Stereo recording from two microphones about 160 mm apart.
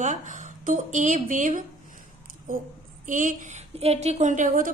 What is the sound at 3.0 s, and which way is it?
A woman's voice, 55° right (ahead or behind).